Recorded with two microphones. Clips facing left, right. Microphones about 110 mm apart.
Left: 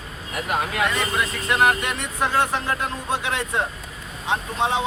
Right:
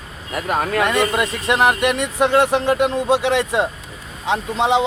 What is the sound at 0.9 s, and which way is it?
Speech, 70° right (ahead or behind).